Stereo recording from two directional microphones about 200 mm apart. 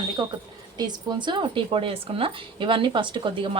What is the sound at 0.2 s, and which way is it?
Speech, 20° right (ahead or behind).